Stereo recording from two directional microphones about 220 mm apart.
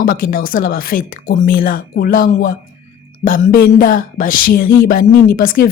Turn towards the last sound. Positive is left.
turn(degrees=40)  # may be behind; listen again after turning